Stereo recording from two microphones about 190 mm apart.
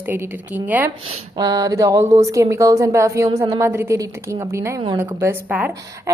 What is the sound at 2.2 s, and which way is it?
A woman's voice, 15° right (ahead or behind).